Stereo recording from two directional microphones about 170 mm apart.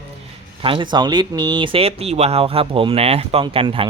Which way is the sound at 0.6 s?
30° right (ahead or behind).